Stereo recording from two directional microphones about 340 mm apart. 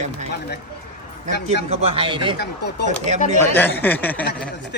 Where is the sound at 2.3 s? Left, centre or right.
Left.